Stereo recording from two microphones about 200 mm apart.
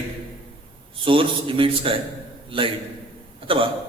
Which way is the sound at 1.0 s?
25° right (ahead or behind).